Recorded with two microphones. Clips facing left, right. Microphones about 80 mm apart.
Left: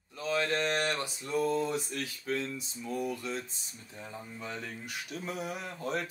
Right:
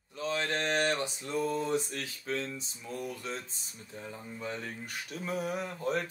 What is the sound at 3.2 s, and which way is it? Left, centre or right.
Speech, right.